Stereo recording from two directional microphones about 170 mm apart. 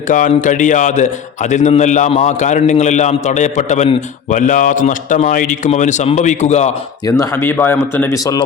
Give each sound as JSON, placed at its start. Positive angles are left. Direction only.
{"t": 0.1, "sound": "a man's voice", "side_deg": 50}
{"t": 7.0, "sound": "speech", "side_deg": 15}